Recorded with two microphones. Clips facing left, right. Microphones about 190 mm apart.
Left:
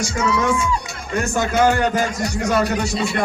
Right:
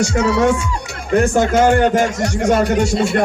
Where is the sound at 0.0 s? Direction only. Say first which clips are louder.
Right 6 dB; 65° right (ahead or behind); by 1.9 s 50° right (ahead or behind).